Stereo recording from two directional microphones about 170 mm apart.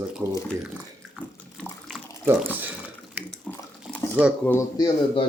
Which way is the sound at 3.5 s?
5° left (ahead or behind).